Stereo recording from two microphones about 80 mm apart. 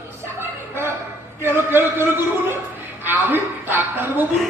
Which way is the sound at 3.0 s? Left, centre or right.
Right.